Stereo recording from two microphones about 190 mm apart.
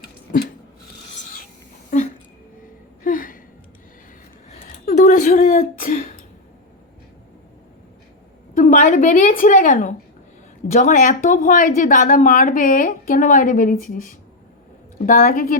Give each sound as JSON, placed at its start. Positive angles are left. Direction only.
{"t": 3.0, "sound": "gasp", "side_deg": 45}
{"t": 4.4, "sound": "throat clearing", "side_deg": 35}
{"t": 8.5, "sound": "a woman's voice", "side_deg": 45}